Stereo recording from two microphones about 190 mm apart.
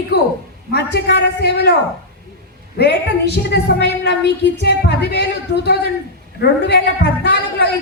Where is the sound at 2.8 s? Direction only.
60° left (ahead or behind).